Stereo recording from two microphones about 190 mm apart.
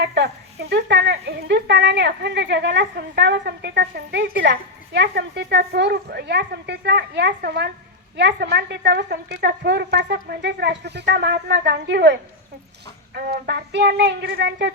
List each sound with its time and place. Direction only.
0.0 s speech: 60° right (ahead or behind)
13.1 s speech: 55° right (ahead or behind)